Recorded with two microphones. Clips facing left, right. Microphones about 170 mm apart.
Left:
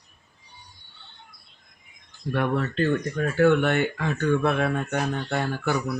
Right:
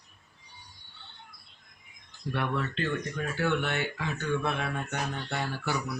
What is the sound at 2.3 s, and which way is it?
Speech, 45° left (ahead or behind).